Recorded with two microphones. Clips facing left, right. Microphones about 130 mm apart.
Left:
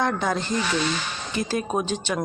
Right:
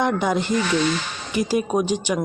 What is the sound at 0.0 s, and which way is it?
A woman's voice, 15° right (ahead or behind).